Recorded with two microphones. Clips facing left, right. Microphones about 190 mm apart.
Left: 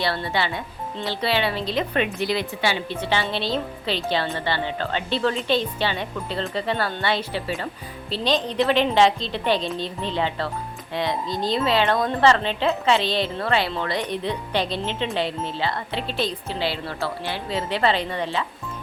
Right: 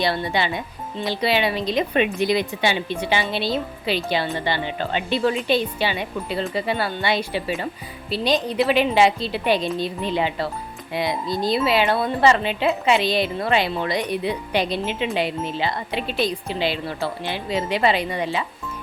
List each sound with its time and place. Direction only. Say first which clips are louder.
0.0 s speech: right 2 dB; 15° right (ahead or behind)